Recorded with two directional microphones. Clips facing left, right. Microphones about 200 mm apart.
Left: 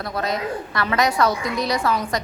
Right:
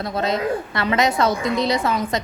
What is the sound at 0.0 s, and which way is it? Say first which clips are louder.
A woman's voice: right 3 dB; 25° right (ahead or behind).